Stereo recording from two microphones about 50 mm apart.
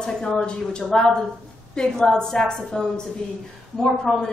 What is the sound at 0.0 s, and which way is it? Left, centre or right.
A woman's voice, centre.